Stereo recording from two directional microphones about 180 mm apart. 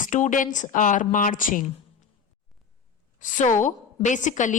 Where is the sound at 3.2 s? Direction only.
45° left (ahead or behind).